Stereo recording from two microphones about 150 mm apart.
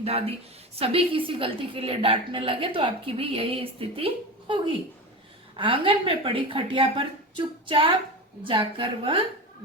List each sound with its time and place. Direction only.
0.0 s a woman's voice: 40° right (ahead or behind)